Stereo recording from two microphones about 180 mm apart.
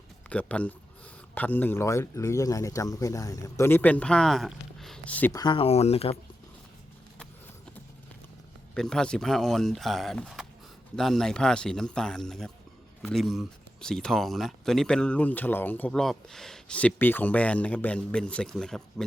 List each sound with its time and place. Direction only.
0.3 s speech: 5° left (ahead or behind)
5.3 s speech: 25° left (ahead or behind)
8.7 s speech: 5° left (ahead or behind)